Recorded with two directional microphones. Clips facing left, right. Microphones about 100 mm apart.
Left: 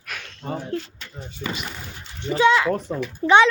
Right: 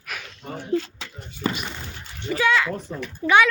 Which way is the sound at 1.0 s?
90° right.